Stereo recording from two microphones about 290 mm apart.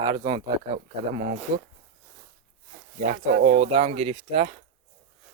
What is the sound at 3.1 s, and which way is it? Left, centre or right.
Speech, right.